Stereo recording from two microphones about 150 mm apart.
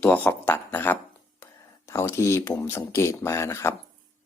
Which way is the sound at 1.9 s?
15° left (ahead or behind).